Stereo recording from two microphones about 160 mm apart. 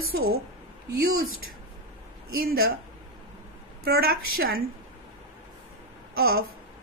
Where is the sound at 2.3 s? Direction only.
70° right (ahead or behind).